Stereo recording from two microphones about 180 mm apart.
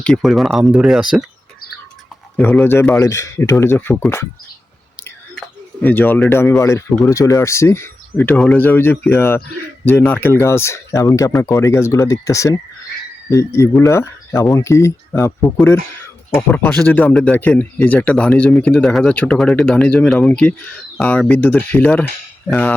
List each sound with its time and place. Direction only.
0.0 s speech: centre (ahead or behind)
2.3 s speech: 5° left (ahead or behind)
5.8 s speech: 10° left (ahead or behind)